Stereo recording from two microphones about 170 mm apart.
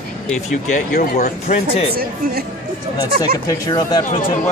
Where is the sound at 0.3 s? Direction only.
45° left (ahead or behind).